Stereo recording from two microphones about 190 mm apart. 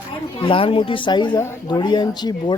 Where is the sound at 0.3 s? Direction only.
30° left (ahead or behind).